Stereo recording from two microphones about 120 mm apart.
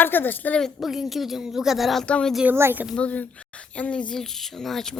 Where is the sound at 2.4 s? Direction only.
20° right (ahead or behind).